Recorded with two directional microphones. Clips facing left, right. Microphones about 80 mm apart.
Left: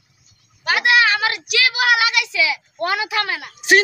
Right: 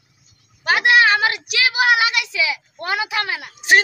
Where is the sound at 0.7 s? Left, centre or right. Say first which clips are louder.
Right 2 dB; right.